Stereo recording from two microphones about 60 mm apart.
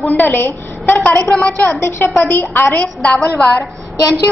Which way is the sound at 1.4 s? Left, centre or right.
Centre.